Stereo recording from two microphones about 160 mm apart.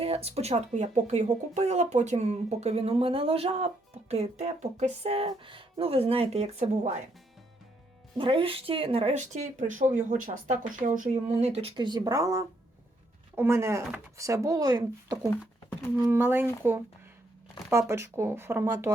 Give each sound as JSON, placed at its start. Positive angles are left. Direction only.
{"t": 0.0, "sound": "speech", "side_deg": -40}
{"t": 8.2, "sound": "speech", "side_deg": -35}
{"t": 16.0, "sound": "speech", "side_deg": -15}
{"t": 17.7, "sound": "speech", "side_deg": -20}